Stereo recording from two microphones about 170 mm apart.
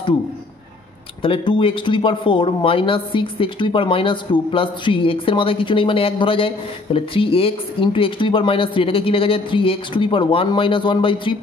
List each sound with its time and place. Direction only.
1.2 s a man's voice: 30° left (ahead or behind)